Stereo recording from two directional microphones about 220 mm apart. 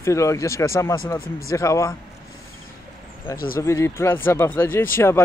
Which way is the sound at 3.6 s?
15° left (ahead or behind).